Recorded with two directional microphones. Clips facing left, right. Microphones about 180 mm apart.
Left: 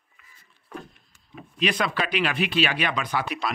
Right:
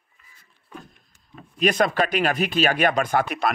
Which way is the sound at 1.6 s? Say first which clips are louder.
Right 5 dB; 45° right (ahead or behind).